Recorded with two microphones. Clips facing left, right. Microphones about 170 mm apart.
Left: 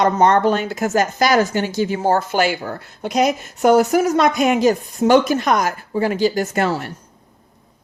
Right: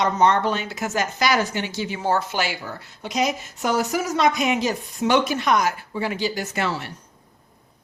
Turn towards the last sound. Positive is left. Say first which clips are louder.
# left 6 dB
turn(degrees=45)  # may be behind; listen again after turning